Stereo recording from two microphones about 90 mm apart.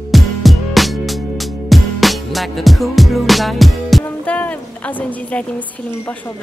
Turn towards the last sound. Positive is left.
turn(degrees=15)  # may be behind; listen again after turning